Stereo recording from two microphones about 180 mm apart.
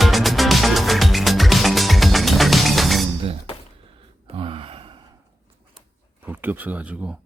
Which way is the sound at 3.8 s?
30° right (ahead or behind).